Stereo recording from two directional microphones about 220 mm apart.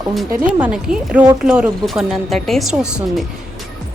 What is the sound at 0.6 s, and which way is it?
A woman's voice, 5° right (ahead or behind).